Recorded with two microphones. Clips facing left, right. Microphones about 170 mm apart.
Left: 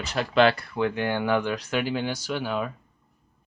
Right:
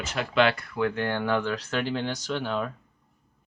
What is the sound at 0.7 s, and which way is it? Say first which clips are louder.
Speech: left 1 dB; 20° left (ahead or behind).